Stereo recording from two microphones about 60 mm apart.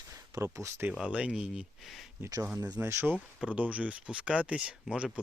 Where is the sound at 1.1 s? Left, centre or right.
Centre.